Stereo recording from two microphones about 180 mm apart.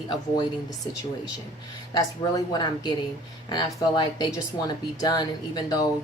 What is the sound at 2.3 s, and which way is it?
Speech, 25° left (ahead or behind).